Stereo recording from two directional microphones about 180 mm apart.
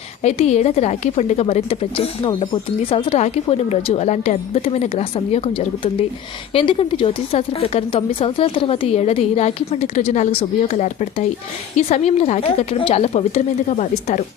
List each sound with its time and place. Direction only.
0.2 s a woman's voice: 35° left (ahead or behind)